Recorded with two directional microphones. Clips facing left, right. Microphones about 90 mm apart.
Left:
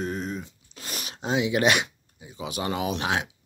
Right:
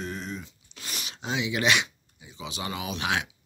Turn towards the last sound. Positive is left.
turn(degrees=40)  # may be behind; listen again after turning